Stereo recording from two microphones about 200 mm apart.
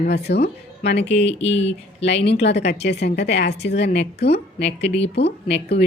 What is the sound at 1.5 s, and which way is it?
Speech, 30° left (ahead or behind).